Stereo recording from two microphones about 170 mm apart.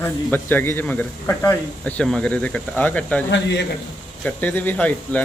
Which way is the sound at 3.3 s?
90° left.